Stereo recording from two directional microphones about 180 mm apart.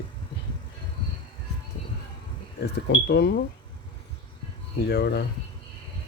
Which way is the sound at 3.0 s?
65° left (ahead or behind).